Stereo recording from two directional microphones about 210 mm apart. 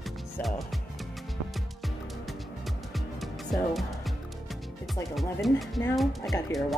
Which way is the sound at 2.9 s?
Centre (ahead or behind).